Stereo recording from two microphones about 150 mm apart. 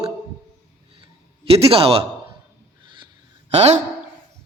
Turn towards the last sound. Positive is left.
turn(degrees=-45)  # may be behind; listen again after turning